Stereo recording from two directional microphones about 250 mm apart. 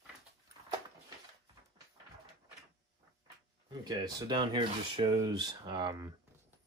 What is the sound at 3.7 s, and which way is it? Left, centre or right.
Speech, centre.